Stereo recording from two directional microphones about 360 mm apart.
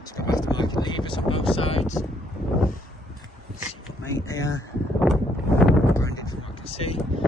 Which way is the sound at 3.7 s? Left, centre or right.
Centre.